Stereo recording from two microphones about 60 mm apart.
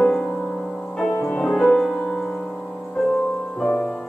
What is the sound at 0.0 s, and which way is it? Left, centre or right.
Music, centre.